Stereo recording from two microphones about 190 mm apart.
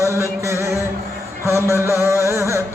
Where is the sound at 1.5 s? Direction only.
15° right (ahead or behind).